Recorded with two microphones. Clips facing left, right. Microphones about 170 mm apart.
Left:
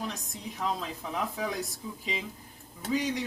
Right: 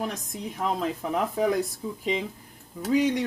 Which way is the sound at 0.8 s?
50° right (ahead or behind).